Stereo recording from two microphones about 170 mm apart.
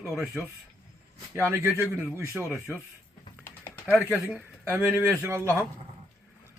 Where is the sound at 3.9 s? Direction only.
10° right (ahead or behind).